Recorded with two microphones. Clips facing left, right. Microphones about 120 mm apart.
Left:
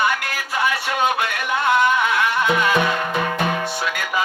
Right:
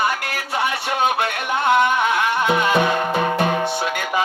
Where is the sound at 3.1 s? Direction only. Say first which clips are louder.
Right 3 dB; 35° right (ahead or behind).